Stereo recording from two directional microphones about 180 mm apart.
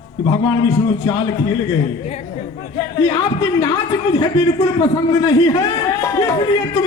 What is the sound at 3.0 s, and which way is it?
A man's voice, 20° left (ahead or behind).